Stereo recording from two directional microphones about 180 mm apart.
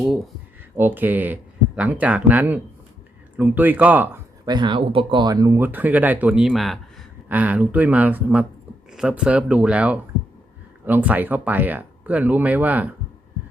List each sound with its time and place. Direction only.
0.8 s speech: 10° right (ahead or behind)
4.4 s speech: 25° right (ahead or behind); by 12.9 s 10° right (ahead or behind)